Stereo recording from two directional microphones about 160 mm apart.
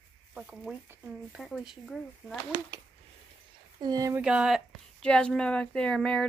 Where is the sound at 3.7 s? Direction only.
25° right (ahead or behind).